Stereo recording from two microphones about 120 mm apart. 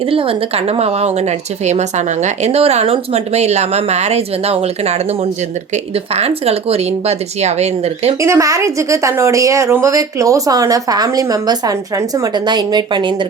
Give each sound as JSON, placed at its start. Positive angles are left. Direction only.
{"t": 0.1, "sound": "speech", "side_deg": -50}
{"t": 1.6, "sound": "speech", "side_deg": -75}
{"t": 8.2, "sound": "a woman's voice", "side_deg": -25}